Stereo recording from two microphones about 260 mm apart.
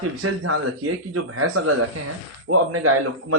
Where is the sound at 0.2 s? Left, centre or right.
Right.